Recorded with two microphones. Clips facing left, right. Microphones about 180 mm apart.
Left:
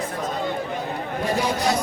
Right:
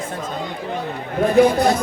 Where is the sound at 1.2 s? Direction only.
55° right (ahead or behind).